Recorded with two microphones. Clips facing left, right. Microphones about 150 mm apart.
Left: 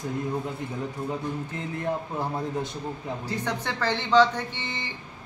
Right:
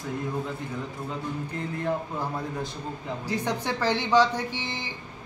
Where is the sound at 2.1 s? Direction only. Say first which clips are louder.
Left 2 dB; 25° left (ahead or behind).